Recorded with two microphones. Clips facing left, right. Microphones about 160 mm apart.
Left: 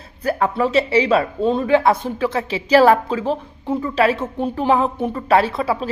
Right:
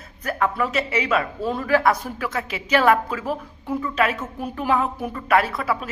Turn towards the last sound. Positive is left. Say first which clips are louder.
# left 5 dB
turn(degrees=25)  # may be behind; listen again after turning